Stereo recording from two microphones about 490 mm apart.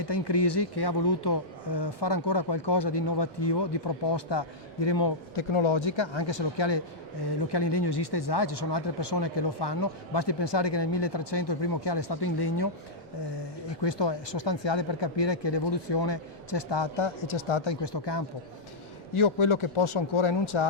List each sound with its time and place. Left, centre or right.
0.0 s speech: left
5.3 s speech: left
19.1 s speech: left